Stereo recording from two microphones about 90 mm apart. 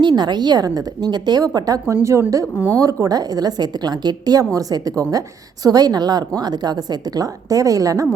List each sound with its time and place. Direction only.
0.0 s a woman's voice: 55° right (ahead or behind)
1.9 s a woman's voice: 30° right (ahead or behind)